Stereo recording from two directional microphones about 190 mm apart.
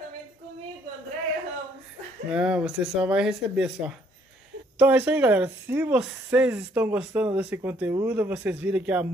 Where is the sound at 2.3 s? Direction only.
5° right (ahead or behind).